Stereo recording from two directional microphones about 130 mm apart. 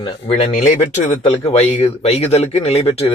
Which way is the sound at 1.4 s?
50° left (ahead or behind).